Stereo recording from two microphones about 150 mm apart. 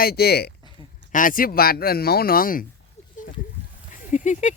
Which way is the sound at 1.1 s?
65° left (ahead or behind).